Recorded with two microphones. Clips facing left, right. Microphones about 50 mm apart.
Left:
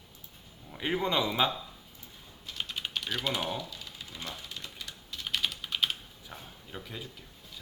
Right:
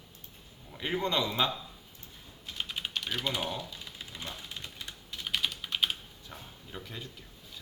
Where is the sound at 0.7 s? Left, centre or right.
Centre.